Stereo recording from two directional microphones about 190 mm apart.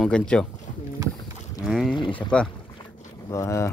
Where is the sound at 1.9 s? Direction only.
25° left (ahead or behind).